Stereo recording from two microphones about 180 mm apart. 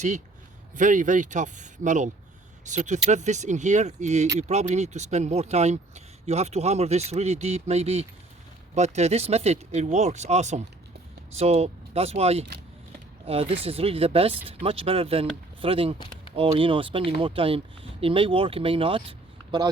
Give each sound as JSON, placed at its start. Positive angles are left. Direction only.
{"t": 0.8, "sound": "speech", "side_deg": -45}